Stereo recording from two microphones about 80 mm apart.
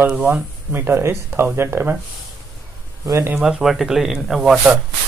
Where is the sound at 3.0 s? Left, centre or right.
Right.